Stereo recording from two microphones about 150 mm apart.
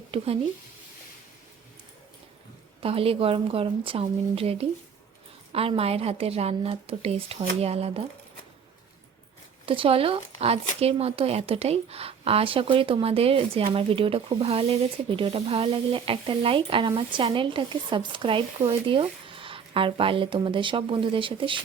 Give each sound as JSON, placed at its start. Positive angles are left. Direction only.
{"t": 0.1, "sound": "speech", "side_deg": -35}
{"t": 2.8, "sound": "speech", "side_deg": -40}
{"t": 9.6, "sound": "speech", "side_deg": -35}